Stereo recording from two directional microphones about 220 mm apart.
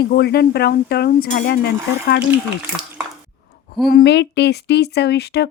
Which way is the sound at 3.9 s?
45° left (ahead or behind).